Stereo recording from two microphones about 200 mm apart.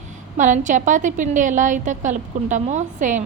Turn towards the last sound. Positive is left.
turn(degrees=-40)  # may be behind; listen again after turning